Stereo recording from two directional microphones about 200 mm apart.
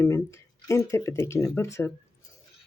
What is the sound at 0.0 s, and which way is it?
Speech, 15° left (ahead or behind).